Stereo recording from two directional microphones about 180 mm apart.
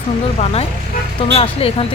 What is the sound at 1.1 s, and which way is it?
Speech, 30° left (ahead or behind).